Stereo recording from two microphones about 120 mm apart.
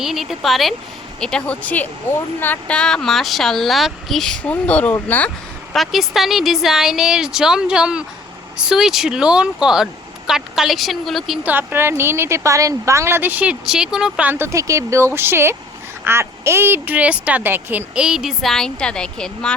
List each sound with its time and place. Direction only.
0.0 s speech: centre (ahead or behind); by 5.3 s 15° left (ahead or behind)
5.7 s speech: centre (ahead or behind)
11.4 s a woman's voice: 15° right (ahead or behind); by 19.5 s 5° left (ahead or behind)